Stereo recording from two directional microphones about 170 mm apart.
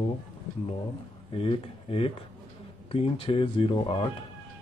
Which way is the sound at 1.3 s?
35° left (ahead or behind).